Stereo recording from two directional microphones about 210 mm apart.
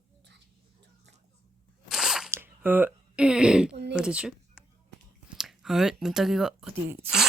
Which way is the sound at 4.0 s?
5° right (ahead or behind).